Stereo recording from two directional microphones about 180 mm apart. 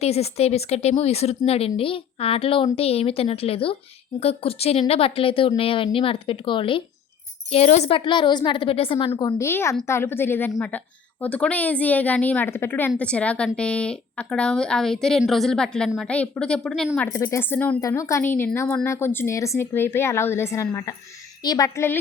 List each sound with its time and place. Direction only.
0.0 s a woman's voice: 35° left (ahead or behind); by 17.1 s centre (ahead or behind)
17.1 s speech: 15° left (ahead or behind)